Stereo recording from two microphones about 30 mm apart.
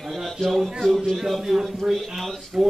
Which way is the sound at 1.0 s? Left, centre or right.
Centre.